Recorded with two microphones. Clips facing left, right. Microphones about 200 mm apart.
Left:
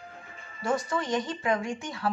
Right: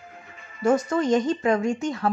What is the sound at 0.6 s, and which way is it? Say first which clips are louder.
Speech: right 8 dB; 45° right (ahead or behind).